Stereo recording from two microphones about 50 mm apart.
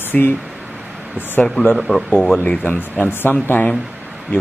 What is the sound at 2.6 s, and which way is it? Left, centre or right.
Speech, left.